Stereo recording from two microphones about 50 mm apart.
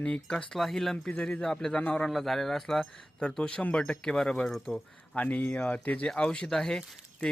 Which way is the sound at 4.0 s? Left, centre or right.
Centre.